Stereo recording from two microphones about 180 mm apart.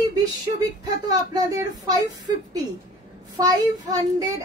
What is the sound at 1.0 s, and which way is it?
A child's voice, 20° right (ahead or behind).